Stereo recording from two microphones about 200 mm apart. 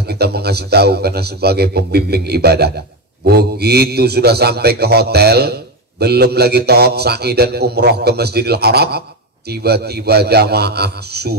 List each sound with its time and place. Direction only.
0.0 s a man's voice: 55° right (ahead or behind)